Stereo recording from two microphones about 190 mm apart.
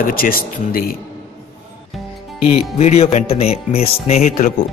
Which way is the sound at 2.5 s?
35° left (ahead or behind).